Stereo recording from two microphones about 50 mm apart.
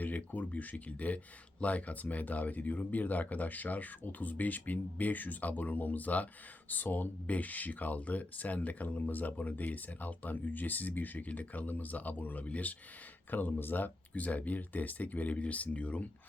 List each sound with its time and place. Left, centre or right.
0.0 s speech: left